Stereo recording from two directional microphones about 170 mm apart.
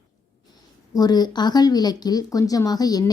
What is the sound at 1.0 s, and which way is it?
Speech, 25° left (ahead or behind).